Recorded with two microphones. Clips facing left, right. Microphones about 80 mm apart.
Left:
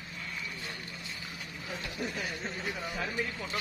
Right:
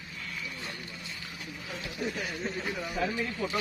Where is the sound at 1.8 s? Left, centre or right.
Right.